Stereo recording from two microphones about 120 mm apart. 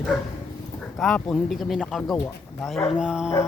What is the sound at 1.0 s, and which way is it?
Speech, 5° left (ahead or behind).